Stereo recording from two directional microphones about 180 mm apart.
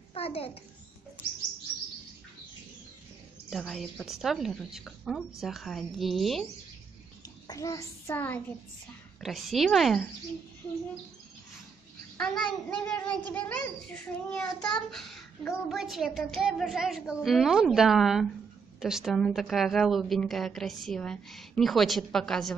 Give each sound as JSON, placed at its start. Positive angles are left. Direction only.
{"t": 0.1, "sound": "a child's voice", "side_deg": 35}
{"t": 3.4, "sound": "a woman's voice", "side_deg": 0}
{"t": 7.4, "sound": "child singing", "side_deg": 20}
{"t": 9.2, "sound": "a woman's voice", "side_deg": 0}
{"t": 12.2, "sound": "a woman's voice", "side_deg": 5}